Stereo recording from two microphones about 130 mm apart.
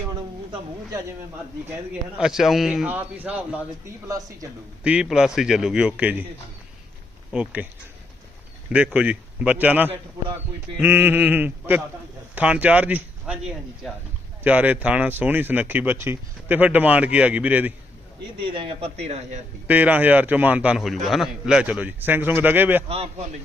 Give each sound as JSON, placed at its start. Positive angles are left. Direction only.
{"t": 2.1, "sound": "a man's voice", "side_deg": -5}
{"t": 4.8, "sound": "a man's voice", "side_deg": -10}
{"t": 7.3, "sound": "speech", "side_deg": -10}
{"t": 8.7, "sound": "speech", "side_deg": -10}
{"t": 18.4, "sound": "a man's voice", "side_deg": -40}
{"t": 19.6, "sound": "speech", "side_deg": -10}
{"t": 22.9, "sound": "a man's voice", "side_deg": -55}